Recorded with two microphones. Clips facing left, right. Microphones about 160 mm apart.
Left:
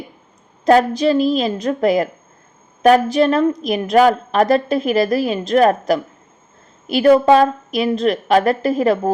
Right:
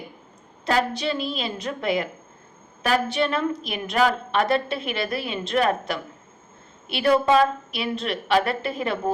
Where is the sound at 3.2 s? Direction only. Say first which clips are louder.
Left 9 dB; 40° left (ahead or behind).